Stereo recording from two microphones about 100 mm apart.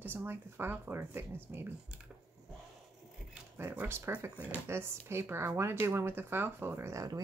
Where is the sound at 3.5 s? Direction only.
20° right (ahead or behind).